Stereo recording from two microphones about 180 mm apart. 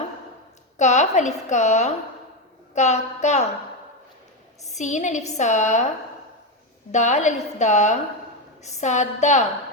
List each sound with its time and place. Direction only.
0.8 s a woman's voice: 40° left (ahead or behind)
4.6 s a woman's voice: 40° left (ahead or behind)
6.9 s a woman's voice: 40° left (ahead or behind)